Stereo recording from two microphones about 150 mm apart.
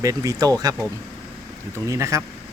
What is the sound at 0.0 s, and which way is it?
Speech, 20° right (ahead or behind).